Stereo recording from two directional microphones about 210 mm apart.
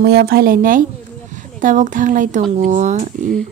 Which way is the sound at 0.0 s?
50° right (ahead or behind).